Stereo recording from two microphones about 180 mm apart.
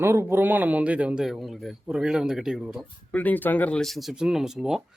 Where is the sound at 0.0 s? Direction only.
15° right (ahead or behind).